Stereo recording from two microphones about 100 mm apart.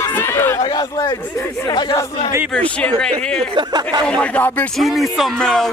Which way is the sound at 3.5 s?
45° right (ahead or behind).